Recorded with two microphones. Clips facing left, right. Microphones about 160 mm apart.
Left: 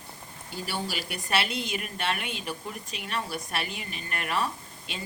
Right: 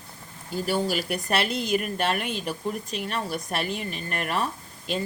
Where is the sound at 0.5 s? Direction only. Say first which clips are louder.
Right 8 dB; 45° right (ahead or behind).